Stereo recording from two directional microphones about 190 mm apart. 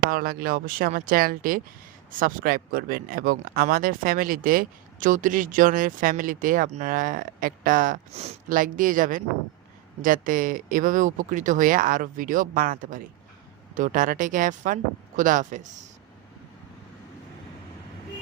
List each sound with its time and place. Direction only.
0.1 s speech: 50° right (ahead or behind)